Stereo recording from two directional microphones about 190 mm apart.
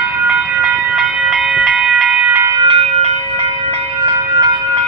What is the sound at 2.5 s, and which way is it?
Train, 30° right (ahead or behind).